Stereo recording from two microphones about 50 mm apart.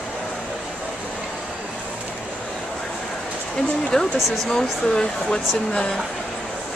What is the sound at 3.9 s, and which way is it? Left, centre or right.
Speech, centre.